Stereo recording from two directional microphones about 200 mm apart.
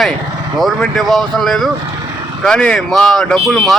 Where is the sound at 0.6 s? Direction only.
Centre (ahead or behind).